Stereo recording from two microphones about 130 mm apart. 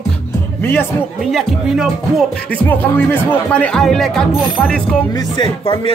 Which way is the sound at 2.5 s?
10° left (ahead or behind).